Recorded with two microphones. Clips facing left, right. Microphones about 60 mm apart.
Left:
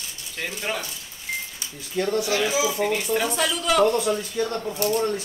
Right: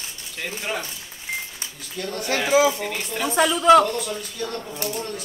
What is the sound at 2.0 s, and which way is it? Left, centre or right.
Speech, left.